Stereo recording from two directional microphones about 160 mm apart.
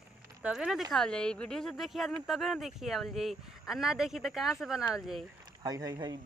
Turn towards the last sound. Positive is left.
turn(degrees=-25)  # may be behind; listen again after turning